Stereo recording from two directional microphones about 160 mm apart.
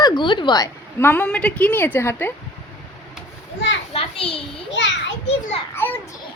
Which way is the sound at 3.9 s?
35° left (ahead or behind).